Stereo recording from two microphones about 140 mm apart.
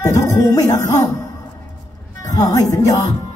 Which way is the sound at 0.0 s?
25° left (ahead or behind).